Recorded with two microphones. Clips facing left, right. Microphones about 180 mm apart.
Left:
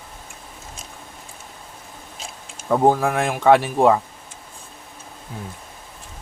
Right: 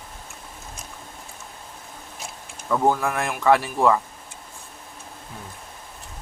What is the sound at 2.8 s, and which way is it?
Speech, 35° left (ahead or behind).